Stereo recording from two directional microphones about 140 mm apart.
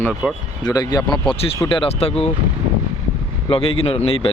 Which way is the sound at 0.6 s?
30° left (ahead or behind).